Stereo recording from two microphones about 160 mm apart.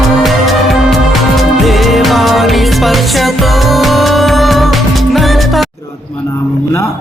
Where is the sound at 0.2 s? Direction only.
Centre (ahead or behind).